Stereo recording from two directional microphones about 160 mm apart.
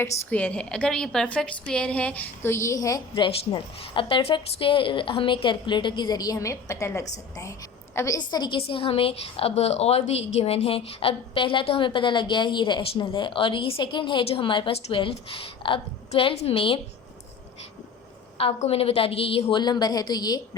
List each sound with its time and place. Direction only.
0.0 s a woman's voice: 10° left (ahead or behind); by 16.8 s 35° left (ahead or behind)
18.3 s a woman's voice: 40° left (ahead or behind)